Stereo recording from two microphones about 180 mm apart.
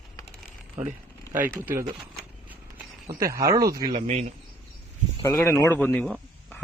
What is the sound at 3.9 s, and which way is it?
Speech, 40° right (ahead or behind).